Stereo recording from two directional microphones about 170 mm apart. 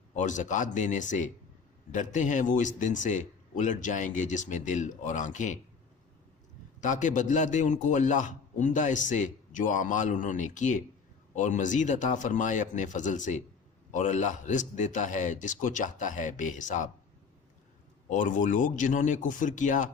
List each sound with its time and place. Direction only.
0.2 s a man's voice: 45° left (ahead or behind)
6.8 s a man's voice: 45° left (ahead or behind)
18.1 s a man's voice: 50° left (ahead or behind)